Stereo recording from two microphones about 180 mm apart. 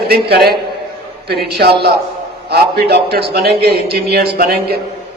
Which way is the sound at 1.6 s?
60° right (ahead or behind).